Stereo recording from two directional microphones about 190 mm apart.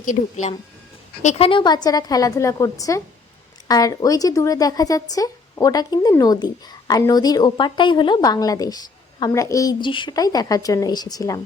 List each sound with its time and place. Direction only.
0.0 s speech: 40° left (ahead or behind); by 11.3 s 20° left (ahead or behind)